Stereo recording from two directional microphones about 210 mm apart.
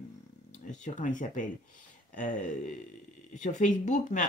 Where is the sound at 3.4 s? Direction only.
35° left (ahead or behind).